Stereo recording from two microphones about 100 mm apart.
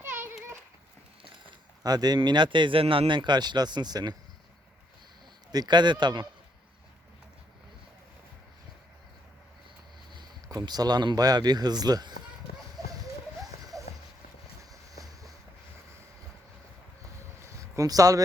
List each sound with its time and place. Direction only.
0.0 s a sound: 25° right (ahead or behind)
1.8 s speech: 40° right (ahead or behind); by 3.1 s 75° right (ahead or behind)
3.1 s speech: 50° right (ahead or behind)
5.5 s speech: 45° right (ahead or behind)
10.5 s speech: 40° right (ahead or behind)
13.4 s music: 35° right (ahead or behind)
14.7 s vehicle: 35° right (ahead or behind)
17.4 s a sound: 35° right (ahead or behind)